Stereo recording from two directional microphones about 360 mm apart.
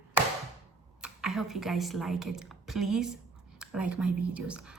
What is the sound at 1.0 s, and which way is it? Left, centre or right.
A woman's voice, centre.